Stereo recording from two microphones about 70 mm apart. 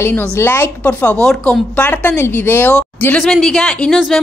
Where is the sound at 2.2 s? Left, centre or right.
Left.